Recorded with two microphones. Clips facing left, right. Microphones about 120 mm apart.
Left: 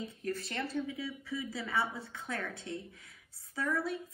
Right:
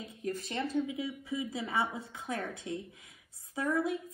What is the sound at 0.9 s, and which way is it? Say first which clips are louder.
Speech: right 3 dB; 20° right (ahead or behind).